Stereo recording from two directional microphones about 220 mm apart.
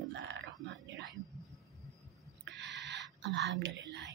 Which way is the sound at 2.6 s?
50° right (ahead or behind).